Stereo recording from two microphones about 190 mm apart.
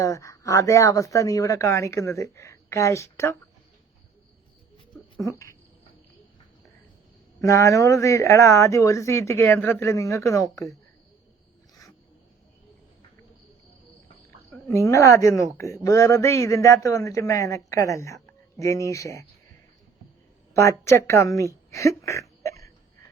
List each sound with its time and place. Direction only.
0.0 s speech: 15° left (ahead or behind)
7.4 s speech: 15° left (ahead or behind)
14.7 s speech: 15° left (ahead or behind)
20.5 s speech: 15° left (ahead or behind)
21.7 s a sound: 15° left (ahead or behind)